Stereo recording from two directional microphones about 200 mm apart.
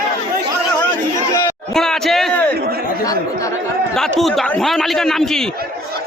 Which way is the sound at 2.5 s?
50° right (ahead or behind).